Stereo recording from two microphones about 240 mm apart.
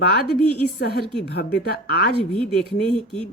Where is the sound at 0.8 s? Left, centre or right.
Left.